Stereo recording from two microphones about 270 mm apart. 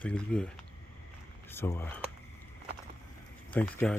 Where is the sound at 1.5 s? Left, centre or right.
Centre.